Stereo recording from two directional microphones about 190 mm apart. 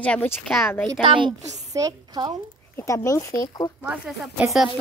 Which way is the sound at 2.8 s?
15° left (ahead or behind).